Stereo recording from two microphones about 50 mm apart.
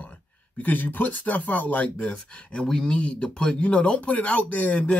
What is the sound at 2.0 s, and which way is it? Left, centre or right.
Speech, centre.